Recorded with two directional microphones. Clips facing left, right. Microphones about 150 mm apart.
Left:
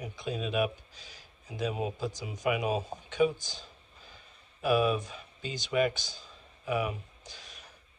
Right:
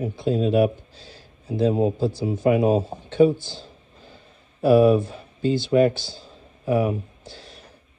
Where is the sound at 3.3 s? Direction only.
15° left (ahead or behind).